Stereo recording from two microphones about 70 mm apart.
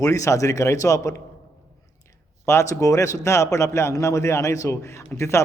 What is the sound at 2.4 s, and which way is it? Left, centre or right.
A man's voice, left.